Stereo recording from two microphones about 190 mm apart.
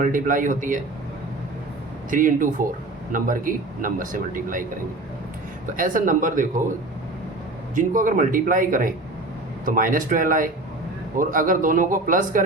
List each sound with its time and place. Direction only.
0.0 s speech: 45° right (ahead or behind)
2.0 s speech: 45° right (ahead or behind)
5.6 s speech: 45° right (ahead or behind)
7.8 s speech: 45° right (ahead or behind)